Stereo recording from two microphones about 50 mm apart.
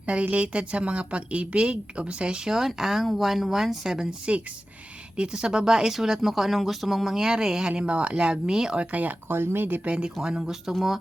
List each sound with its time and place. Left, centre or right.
0.0 s a woman's voice: right
5.1 s a woman's voice: centre
8.8 s speech: right
9.3 s speech: right
9.8 s speech: centre